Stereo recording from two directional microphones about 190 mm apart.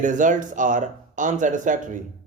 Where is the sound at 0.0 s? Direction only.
40° right (ahead or behind).